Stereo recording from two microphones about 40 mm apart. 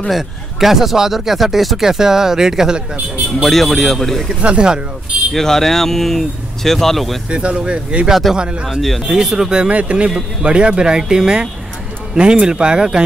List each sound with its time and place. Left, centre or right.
0.1 s speech: centre
1.8 s speech: centre
3.4 s speech: centre
4.4 s a man's voice: right
5.3 s speech: centre
7.2 s a man's voice: right
8.8 s speech: centre
9.1 s speech: centre
9.7 s a man's voice: right